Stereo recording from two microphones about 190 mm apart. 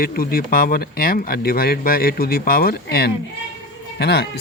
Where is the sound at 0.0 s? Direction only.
50° left (ahead or behind).